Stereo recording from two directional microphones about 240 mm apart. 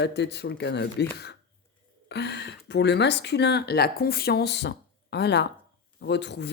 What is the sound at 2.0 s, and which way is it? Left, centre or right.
Speech, left.